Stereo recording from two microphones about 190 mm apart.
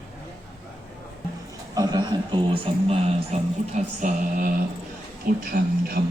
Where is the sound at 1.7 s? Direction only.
20° right (ahead or behind).